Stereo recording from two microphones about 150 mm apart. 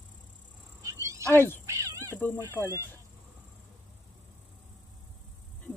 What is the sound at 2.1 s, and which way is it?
Speech, 10° left (ahead or behind).